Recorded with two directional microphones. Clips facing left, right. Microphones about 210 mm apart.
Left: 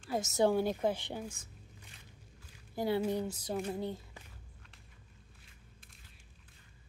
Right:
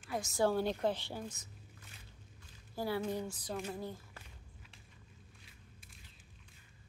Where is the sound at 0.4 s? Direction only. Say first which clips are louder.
Left 3 dB; 15° left (ahead or behind).